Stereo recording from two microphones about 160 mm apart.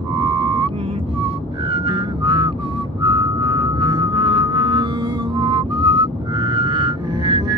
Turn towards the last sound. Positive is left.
turn(degrees=-30)  # may be behind; listen again after turning